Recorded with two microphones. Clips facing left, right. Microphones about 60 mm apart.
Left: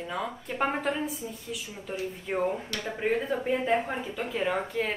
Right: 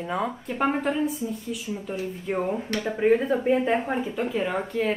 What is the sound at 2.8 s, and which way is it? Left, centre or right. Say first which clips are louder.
Speech: right 8 dB; centre.